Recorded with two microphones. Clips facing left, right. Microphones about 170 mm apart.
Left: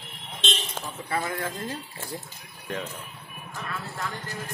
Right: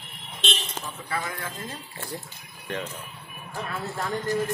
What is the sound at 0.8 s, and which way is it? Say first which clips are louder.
Speech: left 3 dB; 30° left (ahead or behind).